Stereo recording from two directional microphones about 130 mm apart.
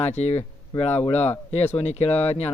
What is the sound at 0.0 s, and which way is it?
Speech, 55° left (ahead or behind).